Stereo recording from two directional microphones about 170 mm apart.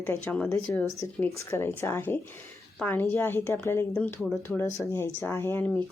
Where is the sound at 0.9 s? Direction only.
15° left (ahead or behind).